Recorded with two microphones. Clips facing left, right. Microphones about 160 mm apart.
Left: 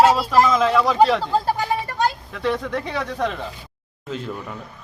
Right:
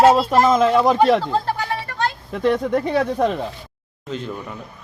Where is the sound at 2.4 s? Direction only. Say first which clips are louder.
Right 5 dB; 45° right (ahead or behind).